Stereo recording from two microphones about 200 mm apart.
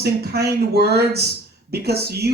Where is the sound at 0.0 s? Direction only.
55° right (ahead or behind).